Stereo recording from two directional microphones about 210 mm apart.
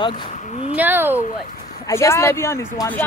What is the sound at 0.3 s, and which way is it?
Speech, 35° left (ahead or behind).